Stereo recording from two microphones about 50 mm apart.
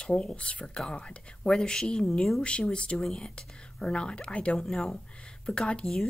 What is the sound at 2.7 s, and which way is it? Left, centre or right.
Speech, left.